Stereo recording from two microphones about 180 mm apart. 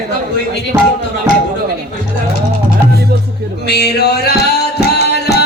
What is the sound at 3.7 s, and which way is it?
Music, 60° left (ahead or behind).